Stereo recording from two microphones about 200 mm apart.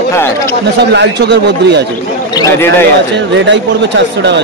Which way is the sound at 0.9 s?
60° right (ahead or behind).